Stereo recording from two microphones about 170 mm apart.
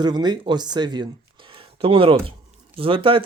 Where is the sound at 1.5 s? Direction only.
30° right (ahead or behind).